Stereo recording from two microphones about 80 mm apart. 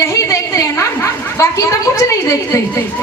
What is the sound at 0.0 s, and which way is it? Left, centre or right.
Chatter, left.